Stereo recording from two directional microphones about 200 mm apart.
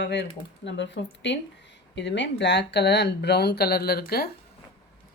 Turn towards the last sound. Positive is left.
turn(degrees=50)  # may be behind; listen again after turning